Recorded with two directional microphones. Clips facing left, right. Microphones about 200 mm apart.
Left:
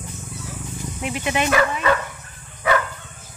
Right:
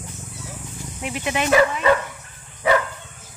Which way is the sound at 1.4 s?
20° right (ahead or behind).